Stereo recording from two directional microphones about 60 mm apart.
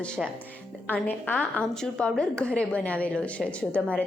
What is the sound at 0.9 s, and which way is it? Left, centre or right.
Speech, left.